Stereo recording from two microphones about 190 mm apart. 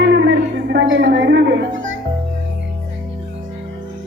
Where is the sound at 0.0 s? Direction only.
65° right (ahead or behind).